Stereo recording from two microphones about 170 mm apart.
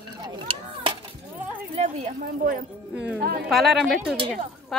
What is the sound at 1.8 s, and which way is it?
Speech, 40° right (ahead or behind).